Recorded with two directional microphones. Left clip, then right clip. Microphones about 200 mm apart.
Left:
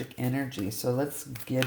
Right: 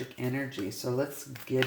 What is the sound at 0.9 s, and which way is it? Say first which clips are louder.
Speech: left 3 dB; 35° left (ahead or behind).